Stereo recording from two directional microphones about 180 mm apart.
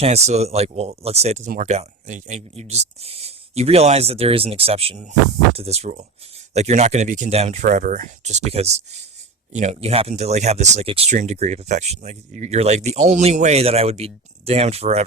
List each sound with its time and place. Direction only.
0.0 s speech: 35° right (ahead or behind)